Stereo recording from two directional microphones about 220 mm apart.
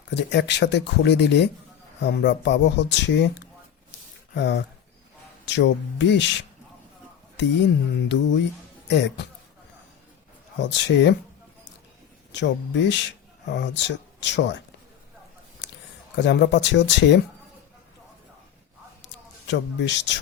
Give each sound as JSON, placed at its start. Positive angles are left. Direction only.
{"t": 0.1, "sound": "speech", "side_deg": 50}
{"t": 8.0, "sound": "speech", "side_deg": 50}
{"t": 10.6, "sound": "speech", "side_deg": 55}
{"t": 12.3, "sound": "speech", "side_deg": 55}
{"t": 16.1, "sound": "speech", "side_deg": 55}
{"t": 19.0, "sound": "a sound", "side_deg": 55}